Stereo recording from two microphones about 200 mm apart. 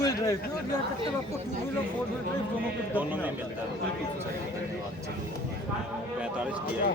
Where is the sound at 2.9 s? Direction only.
10° right (ahead or behind).